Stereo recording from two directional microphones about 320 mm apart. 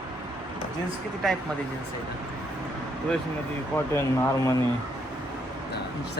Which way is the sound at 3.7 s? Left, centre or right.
Centre.